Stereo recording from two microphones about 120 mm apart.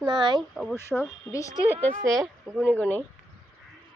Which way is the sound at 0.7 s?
20° left (ahead or behind).